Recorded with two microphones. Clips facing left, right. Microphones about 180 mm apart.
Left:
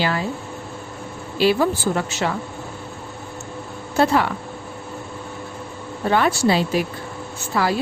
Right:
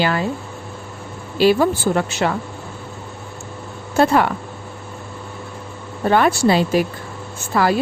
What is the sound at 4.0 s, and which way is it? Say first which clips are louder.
Speech: right 2 dB; 50° right (ahead or behind).